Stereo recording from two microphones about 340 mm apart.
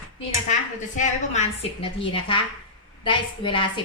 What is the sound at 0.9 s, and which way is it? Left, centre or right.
Speech, left.